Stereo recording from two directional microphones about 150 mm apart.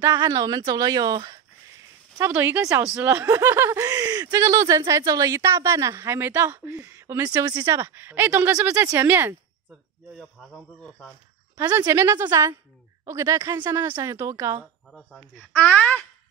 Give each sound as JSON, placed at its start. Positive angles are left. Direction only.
{"t": 0.0, "sound": "speech", "side_deg": -20}
{"t": 2.1, "sound": "a woman's voice", "side_deg": -15}
{"t": 10.1, "sound": "speech", "side_deg": 0}
{"t": 11.7, "sound": "a woman's voice", "side_deg": -15}
{"t": 14.9, "sound": "speech", "side_deg": 0}